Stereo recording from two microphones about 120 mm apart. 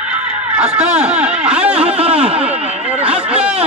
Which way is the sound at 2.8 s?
10° right (ahead or behind).